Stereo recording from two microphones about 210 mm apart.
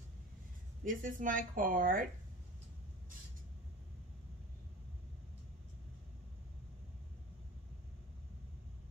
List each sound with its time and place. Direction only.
0.8 s speech: 40° right (ahead or behind)